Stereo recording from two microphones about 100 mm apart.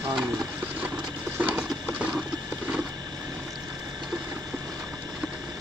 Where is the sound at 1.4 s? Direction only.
15° right (ahead or behind).